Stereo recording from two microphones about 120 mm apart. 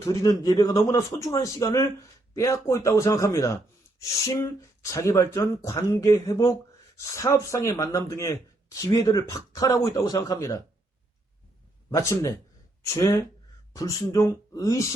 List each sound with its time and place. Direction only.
0.0 s speech: 30° left (ahead or behind)
11.9 s speech: 30° left (ahead or behind)